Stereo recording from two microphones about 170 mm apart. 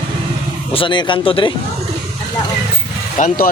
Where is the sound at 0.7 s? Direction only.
30° left (ahead or behind).